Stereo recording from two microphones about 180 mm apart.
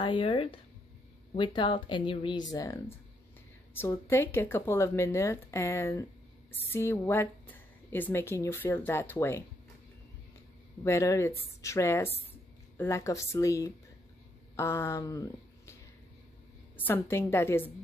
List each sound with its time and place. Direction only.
0.0 s a woman's voice: 30° left (ahead or behind); by 9.4 s 15° left (ahead or behind)
10.8 s a woman's voice: 15° left (ahead or behind)
16.7 s a woman's voice: 10° left (ahead or behind)